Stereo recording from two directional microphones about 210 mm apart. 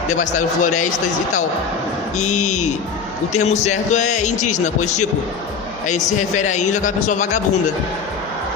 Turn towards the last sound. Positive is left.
turn(degrees=35)  # may be behind; listen again after turning